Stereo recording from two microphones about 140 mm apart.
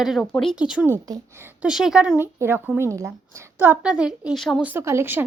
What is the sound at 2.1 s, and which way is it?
A woman's voice, 15° right (ahead or behind).